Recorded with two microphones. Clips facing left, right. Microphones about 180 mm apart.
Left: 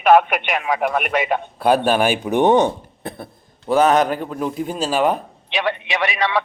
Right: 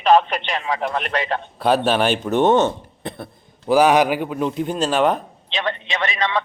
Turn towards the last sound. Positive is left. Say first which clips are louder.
# left 2 dB
turn(degrees=15)  # may be behind; listen again after turning